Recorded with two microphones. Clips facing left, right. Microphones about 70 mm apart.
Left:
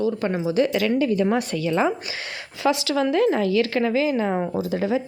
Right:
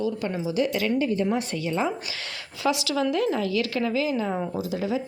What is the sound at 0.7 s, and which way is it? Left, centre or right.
A woman's voice, left.